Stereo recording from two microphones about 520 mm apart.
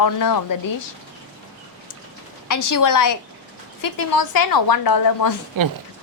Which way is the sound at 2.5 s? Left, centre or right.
Left.